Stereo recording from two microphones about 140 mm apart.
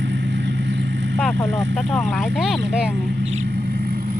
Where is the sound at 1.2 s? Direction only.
5° left (ahead or behind).